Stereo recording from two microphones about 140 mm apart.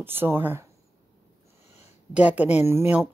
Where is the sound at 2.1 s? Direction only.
10° right (ahead or behind).